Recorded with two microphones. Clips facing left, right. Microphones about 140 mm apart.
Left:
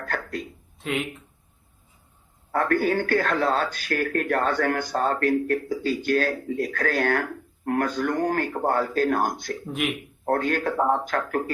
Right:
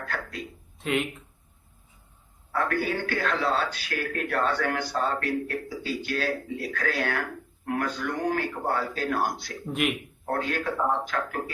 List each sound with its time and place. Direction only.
0.0 s a sound: 45° left (ahead or behind)
0.8 s speech: centre (ahead or behind)
2.5 s speech: 45° left (ahead or behind)
9.6 s speech: centre (ahead or behind)
10.2 s speech: 45° left (ahead or behind)